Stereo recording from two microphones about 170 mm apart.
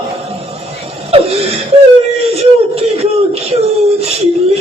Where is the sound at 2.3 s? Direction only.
35° right (ahead or behind).